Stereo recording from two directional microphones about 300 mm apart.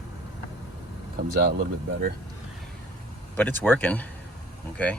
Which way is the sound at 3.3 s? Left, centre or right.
Centre.